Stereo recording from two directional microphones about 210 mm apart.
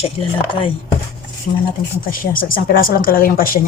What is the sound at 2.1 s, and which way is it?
Speech, 40° left (ahead or behind).